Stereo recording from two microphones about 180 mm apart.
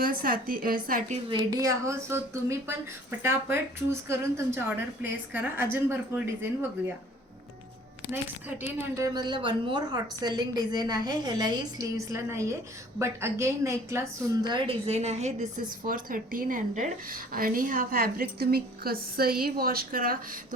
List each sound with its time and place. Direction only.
0.0 s a woman's voice: 55° right (ahead or behind)
1.3 s a woman's voice: 20° right (ahead or behind)
8.1 s a woman's voice: 10° right (ahead or behind)
9.1 s a woman's voice: 25° right (ahead or behind)
14.4 s a woman's voice: 30° right (ahead or behind)
15.9 s a woman's voice: 50° right (ahead or behind)